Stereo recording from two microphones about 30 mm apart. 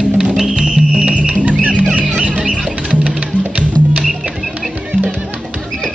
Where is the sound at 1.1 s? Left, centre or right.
Right.